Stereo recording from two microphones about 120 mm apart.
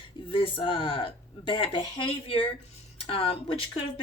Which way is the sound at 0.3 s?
50° left (ahead or behind).